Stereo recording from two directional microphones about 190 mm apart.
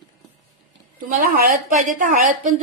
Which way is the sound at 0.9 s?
45° right (ahead or behind).